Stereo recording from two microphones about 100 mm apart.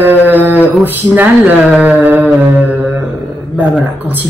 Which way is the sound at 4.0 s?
20° right (ahead or behind).